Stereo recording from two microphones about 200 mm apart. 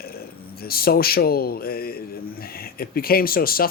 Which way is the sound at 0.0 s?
50° left (ahead or behind).